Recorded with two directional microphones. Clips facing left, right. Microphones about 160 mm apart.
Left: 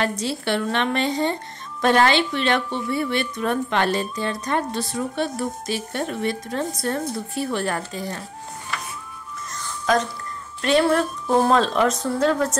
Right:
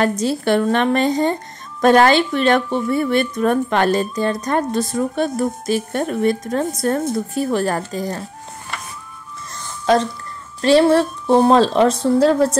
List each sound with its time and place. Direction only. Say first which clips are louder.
0.0 s a woman's voice: right 6 dB; 45° right (ahead or behind)
9.9 s a woman's voice: right 5 dB; 30° right (ahead or behind)